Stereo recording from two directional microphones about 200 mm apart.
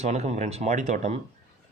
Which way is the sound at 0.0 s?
35° right (ahead or behind).